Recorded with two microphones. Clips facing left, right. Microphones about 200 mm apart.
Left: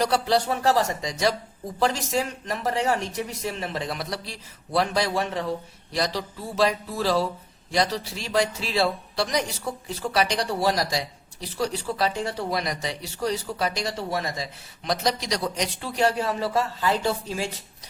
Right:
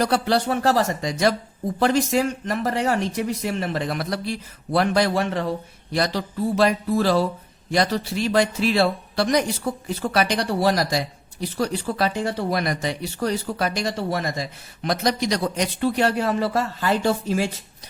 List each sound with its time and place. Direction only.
0.0 s speech: 60° right (ahead or behind)